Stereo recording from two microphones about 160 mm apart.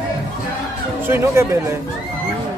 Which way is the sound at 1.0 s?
15° right (ahead or behind).